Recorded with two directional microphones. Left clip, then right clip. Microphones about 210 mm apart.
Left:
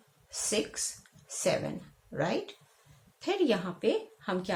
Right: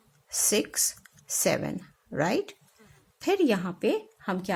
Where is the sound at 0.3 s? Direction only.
45° right (ahead or behind).